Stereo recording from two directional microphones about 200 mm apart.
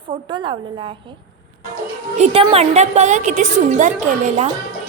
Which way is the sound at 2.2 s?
30° right (ahead or behind).